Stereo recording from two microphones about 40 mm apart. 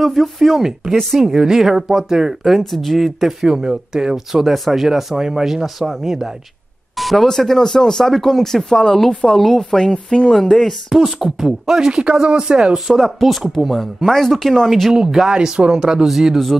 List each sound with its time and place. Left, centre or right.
0.0 s speech: centre
1.3 s speech: centre
2.4 s speech: centre
3.4 s speech: centre
4.3 s speech: centre
7.0 s a sound: centre
7.2 s speech: centre
9.8 s speech: centre
10.9 s speech: centre
11.9 s speech: right
12.2 s speech: centre
14.9 s speech: centre